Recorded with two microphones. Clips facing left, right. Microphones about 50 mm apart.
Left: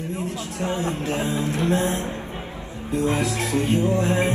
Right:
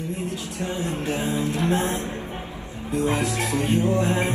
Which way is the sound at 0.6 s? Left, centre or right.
Left.